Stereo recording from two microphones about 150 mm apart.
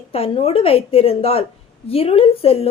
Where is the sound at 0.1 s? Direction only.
40° left (ahead or behind).